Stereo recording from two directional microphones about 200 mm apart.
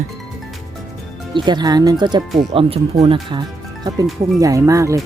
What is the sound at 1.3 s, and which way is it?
Speech, 20° right (ahead or behind).